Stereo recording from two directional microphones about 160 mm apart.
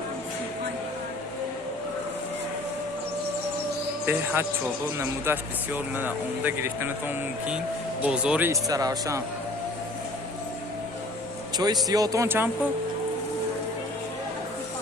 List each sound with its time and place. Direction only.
4.0 s speech: 15° right (ahead or behind)
8.0 s speech: 5° right (ahead or behind)
8.6 s speech: 20° right (ahead or behind)
11.5 s speech: 25° right (ahead or behind)